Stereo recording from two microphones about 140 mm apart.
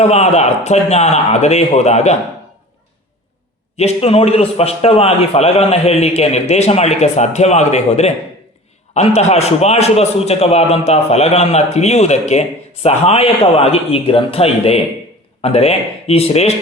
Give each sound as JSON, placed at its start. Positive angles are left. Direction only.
{"t": 0.0, "sound": "a man's voice", "side_deg": 50}
{"t": 3.8, "sound": "a man's voice", "side_deg": 45}